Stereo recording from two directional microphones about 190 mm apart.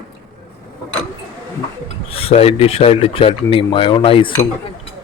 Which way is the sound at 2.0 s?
30° left (ahead or behind).